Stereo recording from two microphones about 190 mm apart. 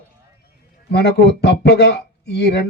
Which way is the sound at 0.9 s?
60° left (ahead or behind).